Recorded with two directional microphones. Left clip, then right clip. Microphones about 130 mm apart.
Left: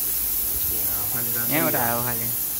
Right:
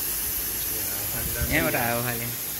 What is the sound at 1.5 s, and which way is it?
Speech, 20° left (ahead or behind).